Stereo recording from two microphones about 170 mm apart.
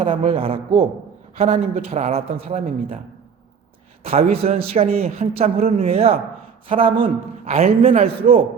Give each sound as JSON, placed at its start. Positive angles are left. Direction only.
{"t": 0.0, "sound": "a man's voice", "side_deg": -35}
{"t": 4.0, "sound": "a man's voice", "side_deg": -35}